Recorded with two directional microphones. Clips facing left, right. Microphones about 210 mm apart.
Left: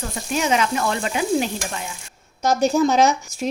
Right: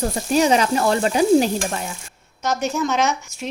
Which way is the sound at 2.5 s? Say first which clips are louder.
Left 4 dB; 35° left (ahead or behind).